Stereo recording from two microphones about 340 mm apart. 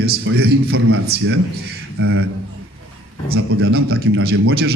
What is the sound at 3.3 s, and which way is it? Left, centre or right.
A man's voice, right.